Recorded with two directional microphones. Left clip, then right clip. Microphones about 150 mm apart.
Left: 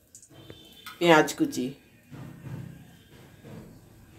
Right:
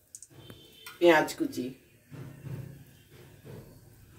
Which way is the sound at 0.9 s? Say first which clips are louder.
Left 3 dB; 75° left (ahead or behind).